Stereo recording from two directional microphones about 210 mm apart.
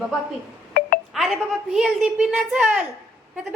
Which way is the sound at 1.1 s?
Centre (ahead or behind).